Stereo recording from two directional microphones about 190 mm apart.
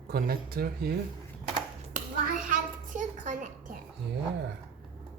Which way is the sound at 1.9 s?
45° right (ahead or behind).